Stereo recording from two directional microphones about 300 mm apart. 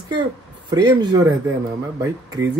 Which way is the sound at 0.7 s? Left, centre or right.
Centre.